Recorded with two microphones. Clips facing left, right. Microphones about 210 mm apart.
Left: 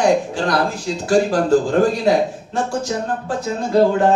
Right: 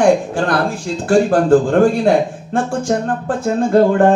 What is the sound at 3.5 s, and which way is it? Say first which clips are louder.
Speech: right 3 dB; 55° right (ahead or behind).